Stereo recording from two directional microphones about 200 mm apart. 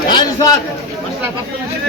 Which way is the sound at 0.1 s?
20° left (ahead or behind).